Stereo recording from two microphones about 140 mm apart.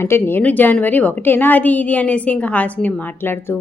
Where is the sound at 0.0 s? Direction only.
15° left (ahead or behind).